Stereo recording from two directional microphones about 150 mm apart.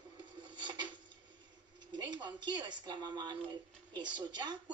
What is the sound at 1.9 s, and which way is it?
A woman's voice, 30° right (ahead or behind).